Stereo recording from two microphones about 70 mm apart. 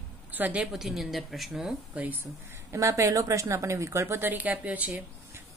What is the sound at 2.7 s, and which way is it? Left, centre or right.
Speech, right.